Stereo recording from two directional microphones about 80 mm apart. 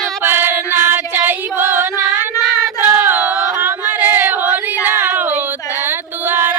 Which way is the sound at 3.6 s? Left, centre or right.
Right.